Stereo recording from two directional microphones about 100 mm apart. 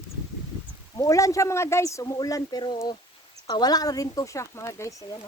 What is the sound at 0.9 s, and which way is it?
Speech, 30° left (ahead or behind).